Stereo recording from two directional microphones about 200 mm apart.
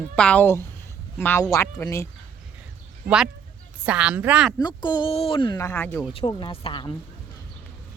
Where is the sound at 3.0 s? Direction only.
5° right (ahead or behind).